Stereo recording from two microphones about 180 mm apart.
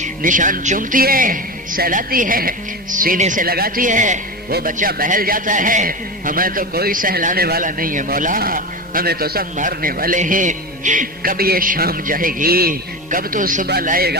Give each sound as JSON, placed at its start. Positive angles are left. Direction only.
{"t": 0.0, "sound": "a man's voice", "side_deg": -45}